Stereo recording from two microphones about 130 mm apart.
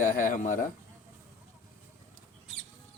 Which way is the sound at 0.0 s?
90° left.